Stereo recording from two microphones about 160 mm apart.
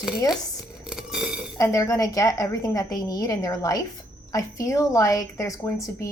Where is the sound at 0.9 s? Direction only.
5° right (ahead or behind).